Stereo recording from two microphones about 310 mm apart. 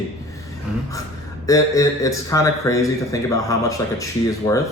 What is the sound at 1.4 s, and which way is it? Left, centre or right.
Speech, centre.